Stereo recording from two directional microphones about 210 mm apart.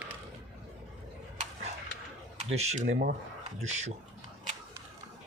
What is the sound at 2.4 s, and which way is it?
Speech, 30° right (ahead or behind).